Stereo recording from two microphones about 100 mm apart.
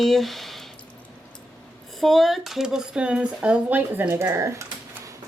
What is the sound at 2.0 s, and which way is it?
Speech, centre (ahead or behind).